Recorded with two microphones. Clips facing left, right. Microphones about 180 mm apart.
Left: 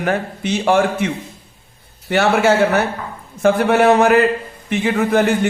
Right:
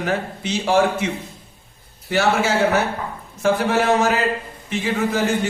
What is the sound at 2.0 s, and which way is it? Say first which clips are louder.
A man's voice: left 5 dB; 60° left (ahead or behind).